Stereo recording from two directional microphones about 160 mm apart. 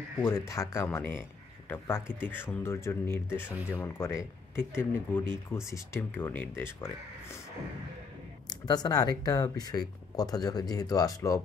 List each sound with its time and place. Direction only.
0.2 s speech: 15° left (ahead or behind)
8.5 s speech: 25° left (ahead or behind)